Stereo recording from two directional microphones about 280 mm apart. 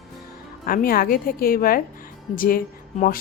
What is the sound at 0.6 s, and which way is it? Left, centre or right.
A woman's voice, left.